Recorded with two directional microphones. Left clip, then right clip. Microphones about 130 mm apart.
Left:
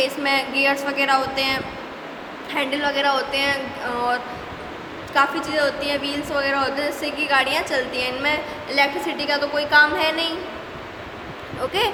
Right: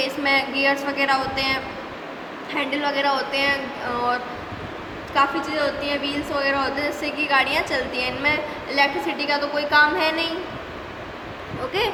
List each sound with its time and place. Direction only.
0.0 s a woman's voice: 15° left (ahead or behind)
11.8 s speech: 30° left (ahead or behind)